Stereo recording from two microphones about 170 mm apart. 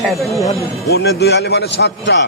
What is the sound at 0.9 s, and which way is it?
A man's voice, 75° left (ahead or behind).